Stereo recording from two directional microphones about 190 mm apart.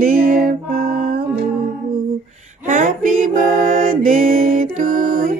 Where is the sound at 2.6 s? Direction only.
40° right (ahead or behind).